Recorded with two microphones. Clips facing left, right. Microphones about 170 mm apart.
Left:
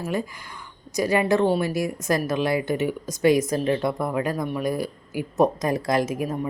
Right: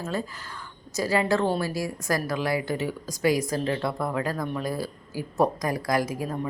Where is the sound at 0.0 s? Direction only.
15° left (ahead or behind).